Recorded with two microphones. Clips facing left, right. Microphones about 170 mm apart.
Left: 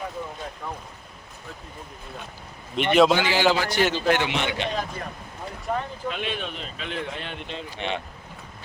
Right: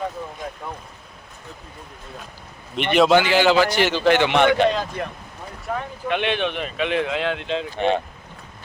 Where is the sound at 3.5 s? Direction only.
80° right; by 4.7 s 55° right (ahead or behind).